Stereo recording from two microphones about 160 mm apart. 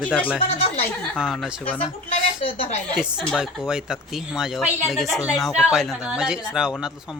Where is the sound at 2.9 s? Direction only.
5° right (ahead or behind).